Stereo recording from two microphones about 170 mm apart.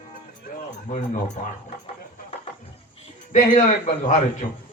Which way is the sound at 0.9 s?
45° left (ahead or behind).